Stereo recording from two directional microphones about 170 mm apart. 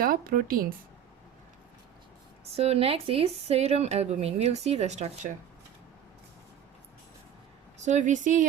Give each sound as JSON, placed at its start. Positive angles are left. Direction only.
{"t": 0.0, "sound": "speech", "side_deg": -60}
{"t": 2.4, "sound": "speech", "side_deg": -35}
{"t": 7.9, "sound": "speech", "side_deg": -45}